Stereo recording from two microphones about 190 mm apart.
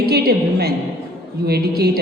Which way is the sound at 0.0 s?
55° right (ahead or behind).